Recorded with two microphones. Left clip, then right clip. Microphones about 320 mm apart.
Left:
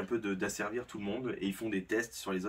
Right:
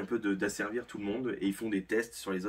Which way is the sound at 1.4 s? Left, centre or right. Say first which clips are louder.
Right 3 dB; centre.